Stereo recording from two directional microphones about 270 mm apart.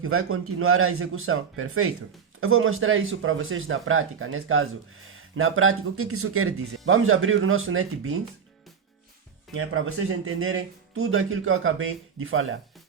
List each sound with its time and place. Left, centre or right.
0.0 s speech: right
9.6 s speech: right